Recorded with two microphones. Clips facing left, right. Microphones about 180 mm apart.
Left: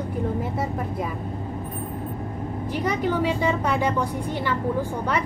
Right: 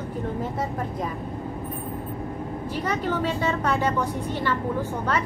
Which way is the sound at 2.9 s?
10° left (ahead or behind).